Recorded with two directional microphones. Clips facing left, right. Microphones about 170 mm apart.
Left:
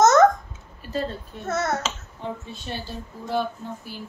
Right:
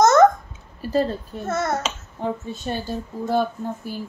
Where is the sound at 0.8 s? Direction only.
35° right (ahead or behind).